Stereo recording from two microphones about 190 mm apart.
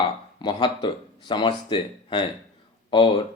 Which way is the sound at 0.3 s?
25° left (ahead or behind).